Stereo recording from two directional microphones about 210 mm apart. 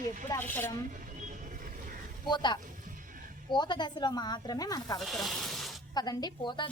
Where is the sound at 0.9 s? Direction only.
35° right (ahead or behind).